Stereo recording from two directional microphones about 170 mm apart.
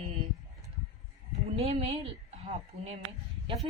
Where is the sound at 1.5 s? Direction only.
35° right (ahead or behind).